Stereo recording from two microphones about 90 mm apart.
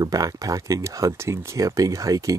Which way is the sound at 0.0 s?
45° right (ahead or behind).